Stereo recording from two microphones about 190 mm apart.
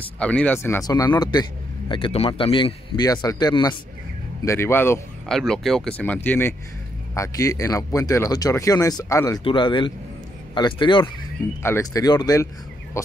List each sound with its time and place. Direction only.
0.2 s a man's voice: 5° left (ahead or behind)
5.3 s a man's voice: centre (ahead or behind); by 12.4 s 20° left (ahead or behind)
13.0 s a sound: 15° left (ahead or behind)